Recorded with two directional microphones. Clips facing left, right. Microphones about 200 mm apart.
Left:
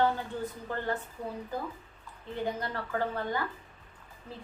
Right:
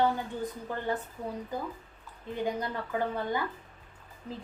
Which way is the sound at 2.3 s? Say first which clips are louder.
Right 2 dB; 15° right (ahead or behind).